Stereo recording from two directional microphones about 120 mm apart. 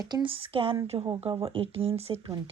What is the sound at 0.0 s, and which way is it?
Speech, 35° right (ahead or behind).